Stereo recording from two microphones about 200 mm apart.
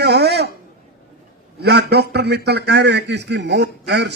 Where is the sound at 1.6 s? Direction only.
55° right (ahead or behind).